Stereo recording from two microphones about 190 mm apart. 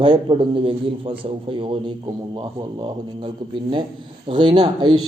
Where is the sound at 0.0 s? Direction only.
25° right (ahead or behind).